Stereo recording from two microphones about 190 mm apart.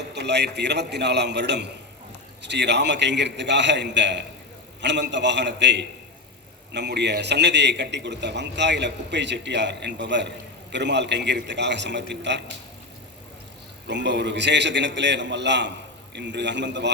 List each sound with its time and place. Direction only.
0.1 s a man's voice: 65° right (ahead or behind)
13.8 s a man's voice: 65° right (ahead or behind)